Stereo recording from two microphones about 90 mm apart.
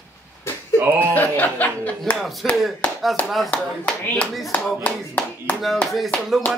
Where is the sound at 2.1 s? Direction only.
Centre (ahead or behind).